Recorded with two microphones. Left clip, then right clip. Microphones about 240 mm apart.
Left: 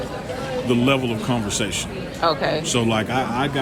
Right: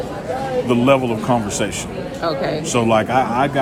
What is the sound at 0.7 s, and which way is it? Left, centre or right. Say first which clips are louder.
Speech: right 4 dB; centre.